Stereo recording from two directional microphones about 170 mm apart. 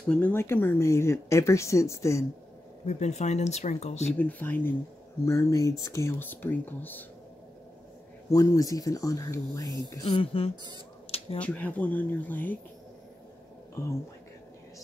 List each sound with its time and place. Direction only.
0.1 s speech: 10° left (ahead or behind)
2.8 s speech: 40° left (ahead or behind)
4.2 s speech: 10° left (ahead or behind)
8.3 s speech: 20° left (ahead or behind)
10.0 s speech: 30° left (ahead or behind)
11.1 s a sound: 35° left (ahead or behind)
11.3 s speech: 10° left (ahead or behind)